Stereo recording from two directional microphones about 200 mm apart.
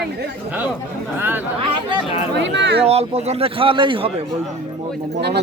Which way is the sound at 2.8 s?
30° right (ahead or behind).